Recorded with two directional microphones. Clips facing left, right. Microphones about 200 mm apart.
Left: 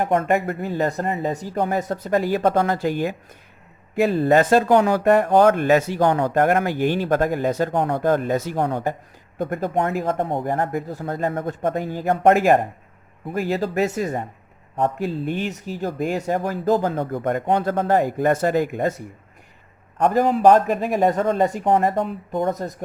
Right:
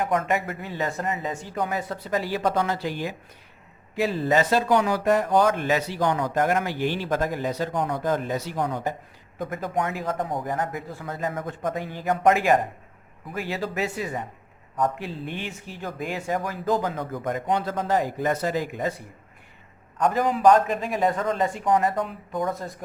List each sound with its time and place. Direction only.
0.0 s speech: 50° left (ahead or behind)
10.2 s speech: 25° left (ahead or behind)
10.4 s speech: 55° left (ahead or behind); by 11.2 s 40° left (ahead or behind)
11.2 s speech: 55° left (ahead or behind); by 17.1 s 35° left (ahead or behind)
17.1 s speech: 55° left (ahead or behind)
21.9 s speech: 25° left (ahead or behind)
22.4 s speech: 40° left (ahead or behind)